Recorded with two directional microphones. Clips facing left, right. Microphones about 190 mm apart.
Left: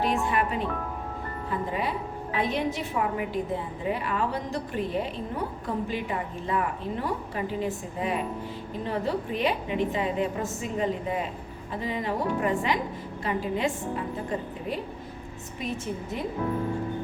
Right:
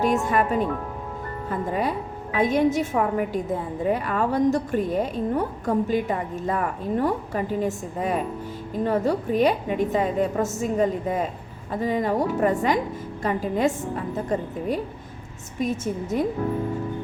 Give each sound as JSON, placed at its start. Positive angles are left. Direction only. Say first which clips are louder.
{"t": 0.0, "sound": "a woman's voice", "louder": "right 4 dB", "side_deg": -45}
{"t": 15.5, "sound": "a woman's voice", "louder": "right 7 dB", "side_deg": -45}